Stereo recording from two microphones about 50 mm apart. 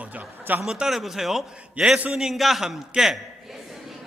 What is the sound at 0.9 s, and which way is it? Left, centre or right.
Speech, centre.